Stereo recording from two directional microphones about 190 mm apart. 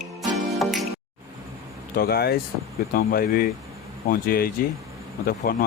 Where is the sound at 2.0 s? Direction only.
55° left (ahead or behind).